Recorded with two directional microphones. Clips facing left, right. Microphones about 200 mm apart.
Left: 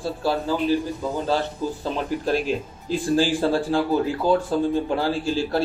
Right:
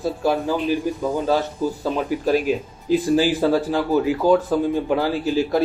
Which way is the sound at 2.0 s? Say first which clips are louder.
Right 3 dB; 10° right (ahead or behind).